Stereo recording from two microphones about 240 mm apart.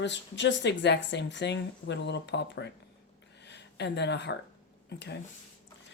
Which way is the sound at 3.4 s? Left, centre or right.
Left.